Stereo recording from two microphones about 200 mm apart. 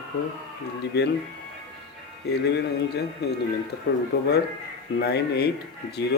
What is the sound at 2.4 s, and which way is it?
Speech, 55° left (ahead or behind).